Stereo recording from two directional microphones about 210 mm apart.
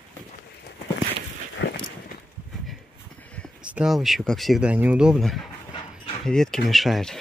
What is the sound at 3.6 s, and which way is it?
Speech, 5° right (ahead or behind).